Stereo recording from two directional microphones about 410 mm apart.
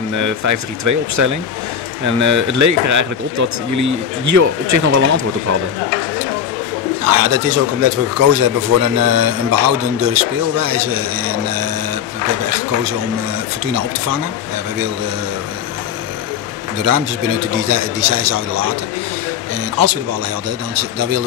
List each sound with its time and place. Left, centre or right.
0.1 s speech: right
7.1 s a man's voice: right
16.8 s speech: right
19.8 s a man's voice: right